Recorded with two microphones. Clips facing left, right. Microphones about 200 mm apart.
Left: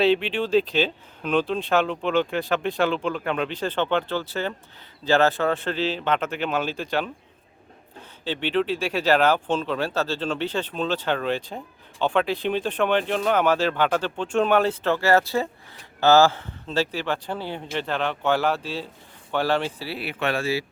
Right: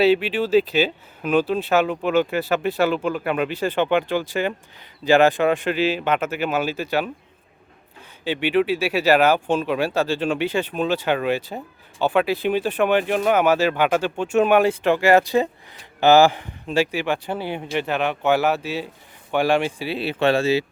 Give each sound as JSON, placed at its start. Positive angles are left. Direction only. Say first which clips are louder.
{"t": 0.0, "sound": "speech", "louder": "right 3 dB", "side_deg": -5}
{"t": 8.2, "sound": "speech", "louder": "right 4 dB", "side_deg": -10}